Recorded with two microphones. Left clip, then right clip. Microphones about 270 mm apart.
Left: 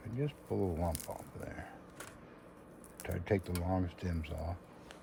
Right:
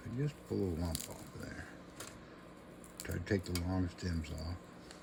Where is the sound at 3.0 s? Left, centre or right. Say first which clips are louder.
Left 3 dB; left.